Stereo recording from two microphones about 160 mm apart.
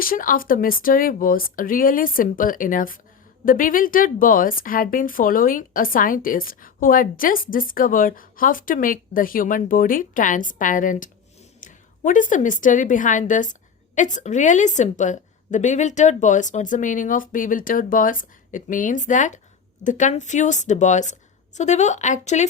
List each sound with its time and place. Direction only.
0.0 s a woman's voice: 60° left (ahead or behind); by 22.4 s 45° left (ahead or behind)